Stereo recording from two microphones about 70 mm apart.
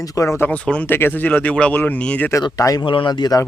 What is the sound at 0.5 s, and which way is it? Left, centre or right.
Speech, centre.